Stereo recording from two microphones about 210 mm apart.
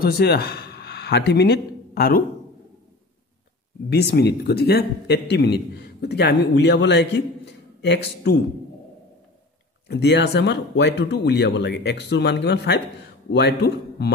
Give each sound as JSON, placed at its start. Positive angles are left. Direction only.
{"t": 0.0, "sound": "a man's voice", "side_deg": 50}
{"t": 3.9, "sound": "a man's voice", "side_deg": 50}
{"t": 9.8, "sound": "a man's voice", "side_deg": 55}